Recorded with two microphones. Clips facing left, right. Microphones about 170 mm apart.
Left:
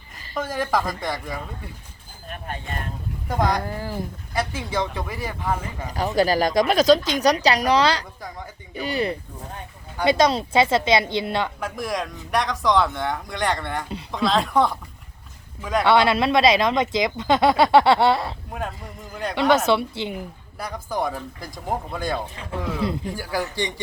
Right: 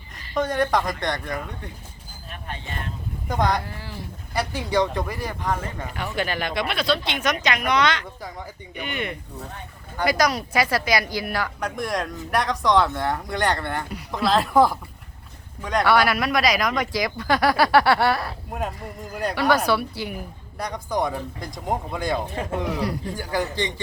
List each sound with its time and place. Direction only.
0.3 s speech: 5° left (ahead or behind)
3.2 s speech: centre (ahead or behind)
3.6 s speech: 45° left (ahead or behind)
4.4 s speech: centre (ahead or behind)
5.9 s a woman's voice: 35° left (ahead or behind)
11.6 s speech: centre (ahead or behind)
15.8 s speech: 25° left (ahead or behind)
20.6 s speech: 5° left (ahead or behind)
22.8 s speech: 25° left (ahead or behind)